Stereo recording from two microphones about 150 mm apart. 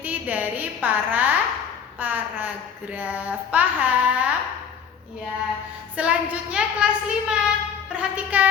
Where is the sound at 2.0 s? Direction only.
10° right (ahead or behind).